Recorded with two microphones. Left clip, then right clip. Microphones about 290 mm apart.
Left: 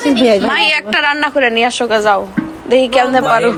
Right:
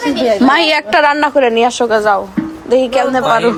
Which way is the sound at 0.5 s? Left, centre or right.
Centre.